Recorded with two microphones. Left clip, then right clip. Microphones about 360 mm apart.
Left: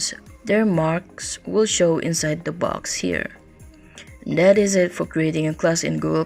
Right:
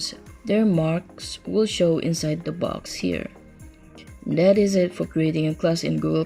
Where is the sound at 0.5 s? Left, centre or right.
Left.